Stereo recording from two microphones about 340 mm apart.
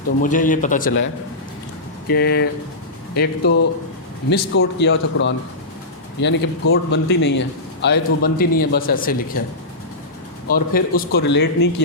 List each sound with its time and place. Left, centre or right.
0.2 s a man's voice: left
10.5 s a man's voice: left